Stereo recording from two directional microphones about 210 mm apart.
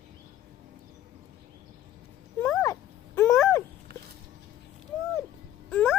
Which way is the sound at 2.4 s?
10° left (ahead or behind).